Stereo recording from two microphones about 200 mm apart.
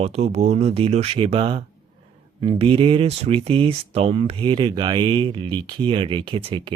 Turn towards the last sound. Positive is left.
turn(degrees=-25)  # may be behind; listen again after turning